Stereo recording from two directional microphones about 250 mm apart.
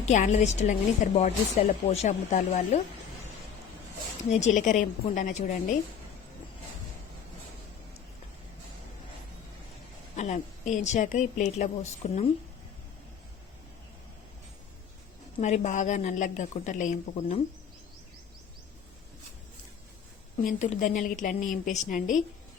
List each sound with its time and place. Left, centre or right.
0.0 s a woman's voice: left
4.3 s a woman's voice: left
10.2 s a woman's voice: left
15.4 s a woman's voice: left
20.4 s a woman's voice: left